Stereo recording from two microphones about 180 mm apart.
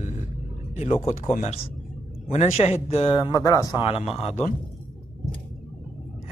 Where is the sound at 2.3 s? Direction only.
35° left (ahead or behind).